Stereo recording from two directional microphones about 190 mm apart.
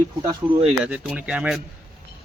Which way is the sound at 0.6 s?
5° right (ahead or behind).